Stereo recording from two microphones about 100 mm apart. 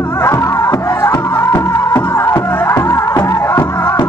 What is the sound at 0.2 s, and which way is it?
Music, 30° left (ahead or behind).